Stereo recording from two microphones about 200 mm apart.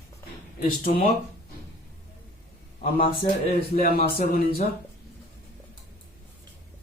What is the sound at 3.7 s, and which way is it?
Speech, 50° left (ahead or behind).